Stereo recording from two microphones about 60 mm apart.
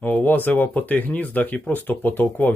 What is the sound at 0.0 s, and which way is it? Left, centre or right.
Speech, left.